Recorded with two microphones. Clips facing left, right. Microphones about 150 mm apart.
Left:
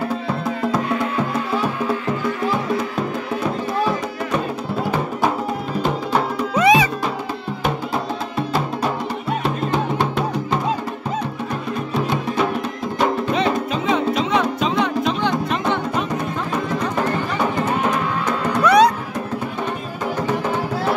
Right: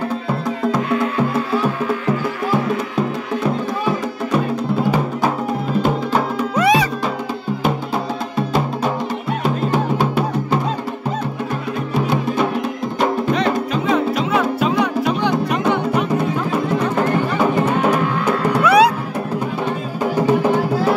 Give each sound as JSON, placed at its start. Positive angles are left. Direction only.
{"t": 6.5, "sound": "music", "side_deg": 0}
{"t": 9.7, "sound": "music", "side_deg": -5}
{"t": 13.0, "sound": "music", "side_deg": 0}
{"t": 18.6, "sound": "music", "side_deg": -5}